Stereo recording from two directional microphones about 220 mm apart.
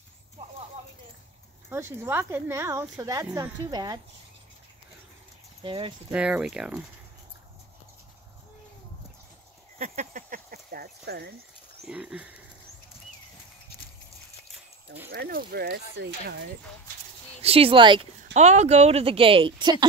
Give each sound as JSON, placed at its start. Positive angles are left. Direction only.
{"t": 1.7, "sound": "speech", "side_deg": -10}
{"t": 5.6, "sound": "speech", "side_deg": -20}
{"t": 6.1, "sound": "speech", "side_deg": -5}
{"t": 9.8, "sound": "a sound", "side_deg": -35}
{"t": 11.8, "sound": "speech", "side_deg": -5}
{"t": 15.0, "sound": "speech", "side_deg": -40}
{"t": 17.4, "sound": "speech", "side_deg": -25}